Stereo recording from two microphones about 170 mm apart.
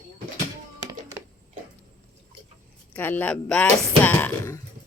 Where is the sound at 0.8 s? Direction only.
20° right (ahead or behind).